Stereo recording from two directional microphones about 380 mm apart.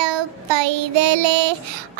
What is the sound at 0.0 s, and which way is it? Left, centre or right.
Child singing, right.